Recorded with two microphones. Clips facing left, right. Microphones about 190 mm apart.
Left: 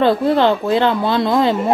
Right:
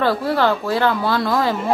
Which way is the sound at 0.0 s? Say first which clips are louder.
Left 4 dB; 20° left (ahead or behind).